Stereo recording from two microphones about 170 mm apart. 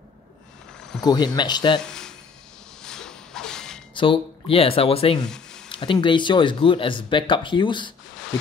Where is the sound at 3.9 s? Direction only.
30° left (ahead or behind).